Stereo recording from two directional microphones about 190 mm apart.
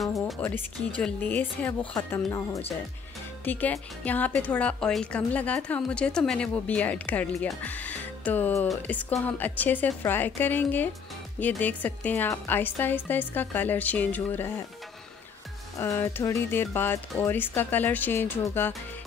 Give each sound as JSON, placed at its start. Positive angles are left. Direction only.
{"t": 0.0, "sound": "a woman's voice", "side_deg": 0}
{"t": 15.8, "sound": "a woman's voice", "side_deg": 15}